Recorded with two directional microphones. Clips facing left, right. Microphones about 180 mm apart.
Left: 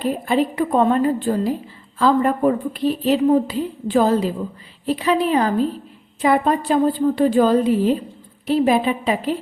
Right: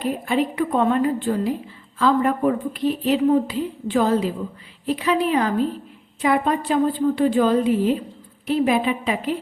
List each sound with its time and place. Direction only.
0.0 s a woman's voice: 35° left (ahead or behind)